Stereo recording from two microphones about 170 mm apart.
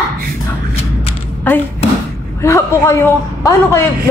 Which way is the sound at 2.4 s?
15° left (ahead or behind).